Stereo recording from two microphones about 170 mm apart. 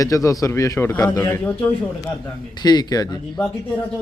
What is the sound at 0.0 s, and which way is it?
A man's voice, 20° left (ahead or behind).